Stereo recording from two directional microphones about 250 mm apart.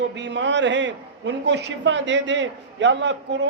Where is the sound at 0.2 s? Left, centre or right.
Right.